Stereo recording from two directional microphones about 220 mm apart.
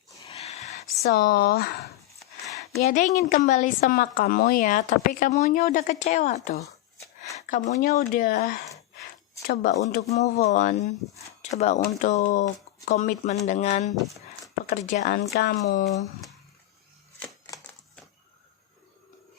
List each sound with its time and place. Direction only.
0.3 s a sound: 30° left (ahead or behind)
1.0 s speech: 45° left (ahead or behind)
2.7 s a woman's voice: 35° left (ahead or behind)
7.2 s a sound: 30° left (ahead or behind)
7.7 s a woman's voice: 40° left (ahead or behind)
17.5 s typewriter: 15° left (ahead or behind)